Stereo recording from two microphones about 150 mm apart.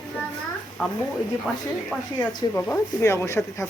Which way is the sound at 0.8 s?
10° left (ahead or behind).